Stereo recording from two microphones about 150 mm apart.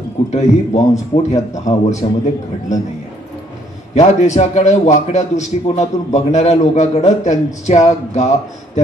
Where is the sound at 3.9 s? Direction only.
50° left (ahead or behind).